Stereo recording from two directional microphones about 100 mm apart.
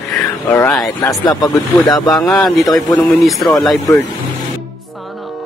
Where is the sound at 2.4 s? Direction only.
Centre (ahead or behind).